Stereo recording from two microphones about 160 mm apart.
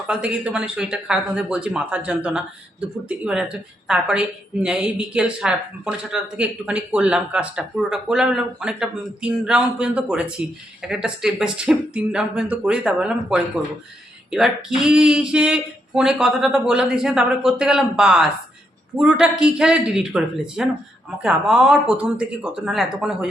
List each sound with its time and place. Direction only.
0.1 s a woman's voice: 5° right (ahead or behind)